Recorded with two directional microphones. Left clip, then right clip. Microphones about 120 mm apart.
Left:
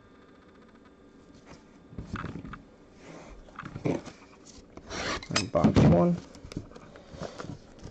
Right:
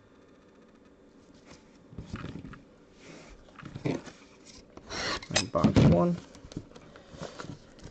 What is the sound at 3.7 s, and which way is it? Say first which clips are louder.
Dog: left 2 dB; 35° right (ahead or behind).